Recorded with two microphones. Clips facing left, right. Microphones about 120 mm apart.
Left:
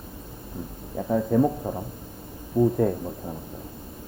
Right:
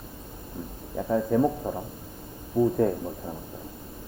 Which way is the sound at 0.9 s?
5° left (ahead or behind).